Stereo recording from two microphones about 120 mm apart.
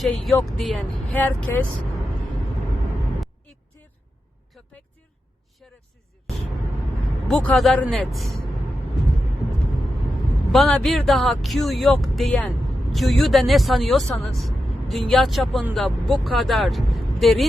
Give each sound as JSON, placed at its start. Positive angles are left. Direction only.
{"t": 0.0, "sound": "speech", "side_deg": 0}
{"t": 1.1, "sound": "speech", "side_deg": 15}
{"t": 3.7, "sound": "vehicle", "side_deg": 20}
{"t": 4.5, "sound": "vehicle", "side_deg": 0}
{"t": 7.3, "sound": "speech", "side_deg": 5}
{"t": 10.5, "sound": "speech", "side_deg": 5}